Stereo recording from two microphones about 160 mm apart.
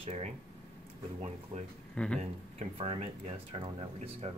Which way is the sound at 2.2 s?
40° right (ahead or behind).